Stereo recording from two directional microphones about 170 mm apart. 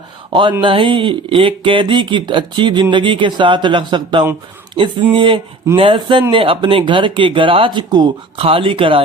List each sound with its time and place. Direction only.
0.6 s speech: 30° right (ahead or behind)